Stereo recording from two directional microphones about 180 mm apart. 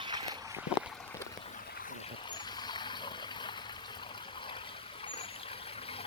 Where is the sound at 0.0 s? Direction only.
25° right (ahead or behind).